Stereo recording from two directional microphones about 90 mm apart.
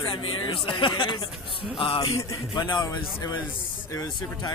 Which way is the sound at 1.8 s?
90° left.